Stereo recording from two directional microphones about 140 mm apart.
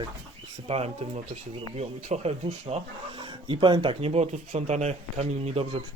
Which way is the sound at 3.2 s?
35° right (ahead or behind).